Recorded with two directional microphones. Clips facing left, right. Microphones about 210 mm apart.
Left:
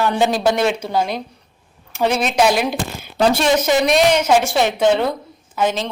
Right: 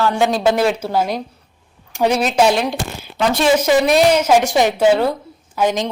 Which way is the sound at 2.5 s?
10° left (ahead or behind).